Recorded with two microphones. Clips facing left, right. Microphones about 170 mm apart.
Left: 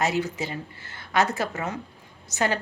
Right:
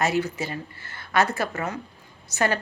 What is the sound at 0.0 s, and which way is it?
A woman's voice, 20° left (ahead or behind).